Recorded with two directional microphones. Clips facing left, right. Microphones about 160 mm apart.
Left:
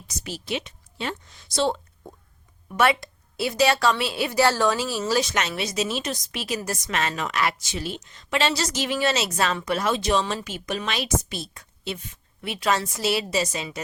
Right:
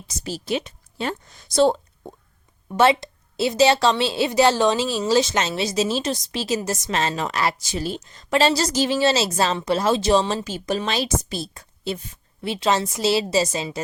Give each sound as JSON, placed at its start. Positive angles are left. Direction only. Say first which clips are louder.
{"t": 0.3, "sound": "a woman's voice", "louder": "right 5 dB", "side_deg": -40}
{"t": 2.6, "sound": "a woman's voice", "louder": "right 4 dB", "side_deg": -25}